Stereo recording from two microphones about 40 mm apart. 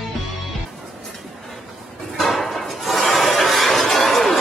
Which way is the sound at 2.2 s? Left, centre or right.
Centre.